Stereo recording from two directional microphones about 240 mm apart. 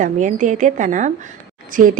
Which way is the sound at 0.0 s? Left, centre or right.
Right.